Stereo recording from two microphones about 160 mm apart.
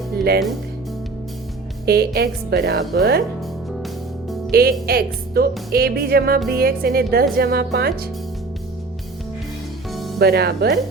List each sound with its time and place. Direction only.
1.9 s a woman's voice: 85° right
4.5 s speech: 70° right (ahead or behind)
10.2 s a woman's voice: 85° right